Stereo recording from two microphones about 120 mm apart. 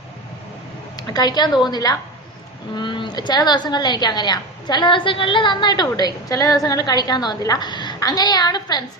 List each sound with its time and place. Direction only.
0.9 s a woman's voice: 35° left (ahead or behind)